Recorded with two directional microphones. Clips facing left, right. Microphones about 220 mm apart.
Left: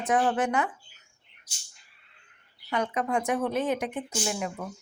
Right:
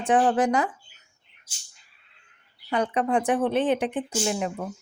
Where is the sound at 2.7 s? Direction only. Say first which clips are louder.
Right 4 dB; 30° right (ahead or behind).